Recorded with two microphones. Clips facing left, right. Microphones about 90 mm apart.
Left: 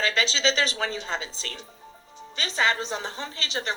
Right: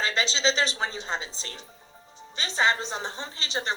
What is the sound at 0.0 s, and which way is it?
A woman's voice, 30° right (ahead or behind).